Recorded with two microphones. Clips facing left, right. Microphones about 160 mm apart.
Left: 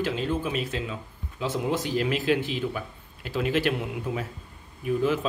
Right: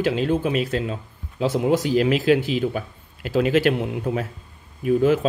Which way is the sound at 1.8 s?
85° right.